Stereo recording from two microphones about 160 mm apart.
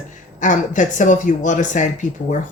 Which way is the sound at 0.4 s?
50° left (ahead or behind).